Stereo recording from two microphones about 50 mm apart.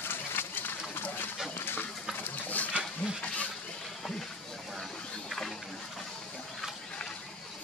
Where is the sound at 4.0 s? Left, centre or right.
Centre.